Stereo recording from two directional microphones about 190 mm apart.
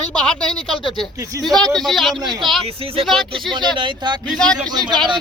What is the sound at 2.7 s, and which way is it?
Speech, 30° right (ahead or behind).